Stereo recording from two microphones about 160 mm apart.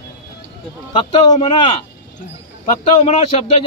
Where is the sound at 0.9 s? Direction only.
30° left (ahead or behind).